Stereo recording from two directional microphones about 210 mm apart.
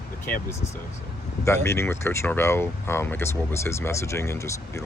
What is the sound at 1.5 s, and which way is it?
Speech, 10° left (ahead or behind).